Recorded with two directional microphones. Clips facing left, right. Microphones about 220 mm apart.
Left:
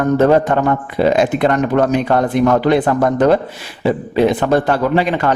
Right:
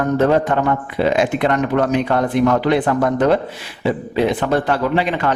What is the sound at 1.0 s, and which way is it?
Speech, 40° left (ahead or behind).